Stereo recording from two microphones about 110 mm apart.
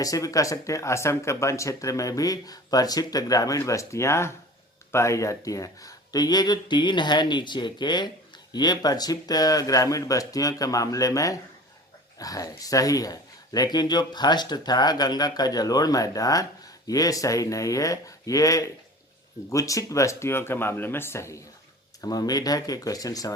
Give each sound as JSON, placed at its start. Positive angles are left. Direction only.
{"t": 0.0, "sound": "speech", "side_deg": 30}